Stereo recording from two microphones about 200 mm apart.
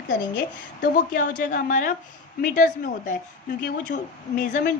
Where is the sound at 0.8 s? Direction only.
40° left (ahead or behind).